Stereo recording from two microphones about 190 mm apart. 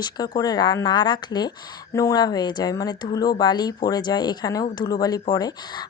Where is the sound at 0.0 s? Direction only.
20° left (ahead or behind).